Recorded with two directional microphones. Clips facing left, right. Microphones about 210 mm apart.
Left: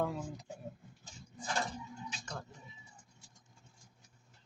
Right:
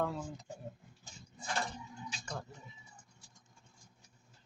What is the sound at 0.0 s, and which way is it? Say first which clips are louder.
Speech: even; 10° left (ahead or behind).